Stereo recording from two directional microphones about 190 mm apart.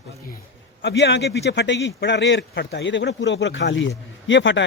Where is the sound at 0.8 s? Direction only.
70° left (ahead or behind).